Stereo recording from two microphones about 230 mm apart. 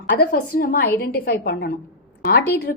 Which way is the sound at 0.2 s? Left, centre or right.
Left.